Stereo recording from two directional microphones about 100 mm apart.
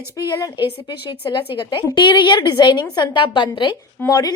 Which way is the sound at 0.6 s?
50° left (ahead or behind).